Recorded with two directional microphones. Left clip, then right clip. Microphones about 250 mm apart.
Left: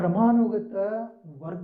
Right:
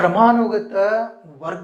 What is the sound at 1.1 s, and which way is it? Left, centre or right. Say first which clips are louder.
Speech: right 10 dB; centre.